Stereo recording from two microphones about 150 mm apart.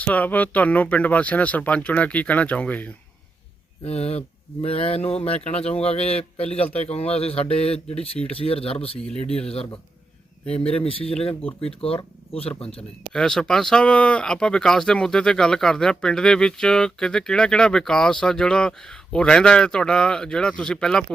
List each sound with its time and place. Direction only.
0.0 s speech: 10° left (ahead or behind)
3.8 s speech: 45° left (ahead or behind)
10.8 s speech: 40° left (ahead or behind)
13.1 s speech: 5° left (ahead or behind)